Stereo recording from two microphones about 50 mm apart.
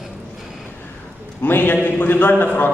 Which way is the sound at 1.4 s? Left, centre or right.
Left.